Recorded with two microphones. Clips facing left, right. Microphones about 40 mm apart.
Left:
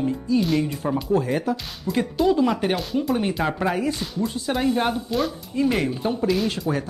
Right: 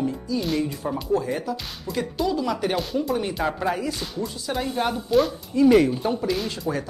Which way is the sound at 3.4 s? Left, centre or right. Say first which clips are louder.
Left 1 dB; centre.